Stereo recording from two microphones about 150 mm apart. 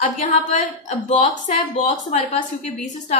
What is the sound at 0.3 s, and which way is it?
A woman's voice, 55° left (ahead or behind).